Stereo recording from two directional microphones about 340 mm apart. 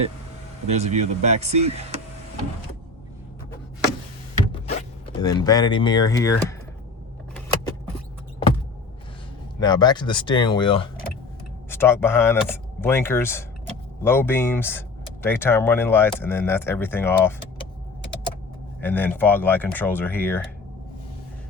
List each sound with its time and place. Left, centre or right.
0.7 s speech: centre
4.5 s speech: centre
9.6 s speech: centre
18.8 s speech: centre